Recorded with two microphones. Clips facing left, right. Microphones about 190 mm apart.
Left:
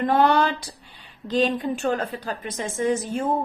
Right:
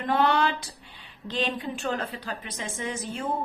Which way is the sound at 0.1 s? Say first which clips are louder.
Left 2 dB; 45° left (ahead or behind).